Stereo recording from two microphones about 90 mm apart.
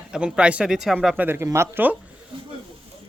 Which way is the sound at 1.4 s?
30° right (ahead or behind).